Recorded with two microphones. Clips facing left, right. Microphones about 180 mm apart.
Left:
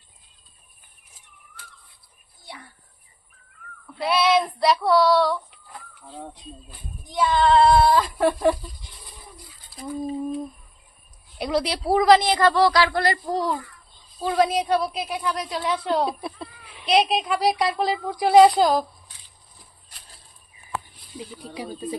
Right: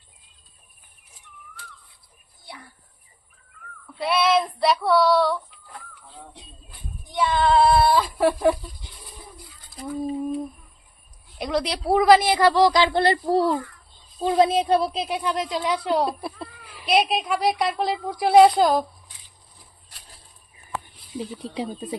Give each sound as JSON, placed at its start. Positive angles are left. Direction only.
{"t": 4.0, "sound": "female singing", "side_deg": 0}
{"t": 7.1, "sound": "female singing", "side_deg": 0}
{"t": 11.3, "sound": "a woman's voice", "side_deg": 0}
{"t": 16.0, "sound": "speech", "side_deg": 0}
{"t": 21.5, "sound": "speech", "side_deg": -25}